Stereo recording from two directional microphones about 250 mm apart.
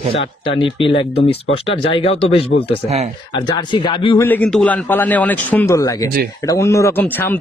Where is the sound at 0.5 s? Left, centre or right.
Left.